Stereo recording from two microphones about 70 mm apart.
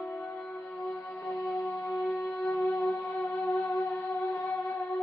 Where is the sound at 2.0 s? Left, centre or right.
Left.